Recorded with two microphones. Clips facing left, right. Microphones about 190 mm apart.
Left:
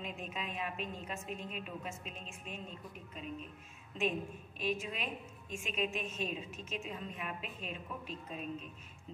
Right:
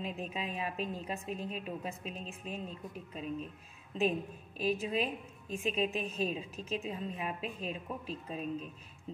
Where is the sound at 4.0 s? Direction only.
35° right (ahead or behind).